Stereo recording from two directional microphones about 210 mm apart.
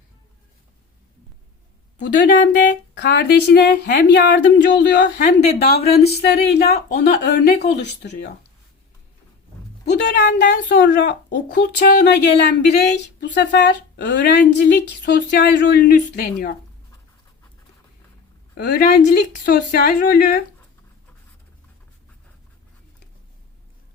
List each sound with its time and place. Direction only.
3.0 s a woman's voice: 55° left (ahead or behind)
9.8 s a woman's voice: 55° left (ahead or behind)
18.5 s a woman's voice: 50° left (ahead or behind)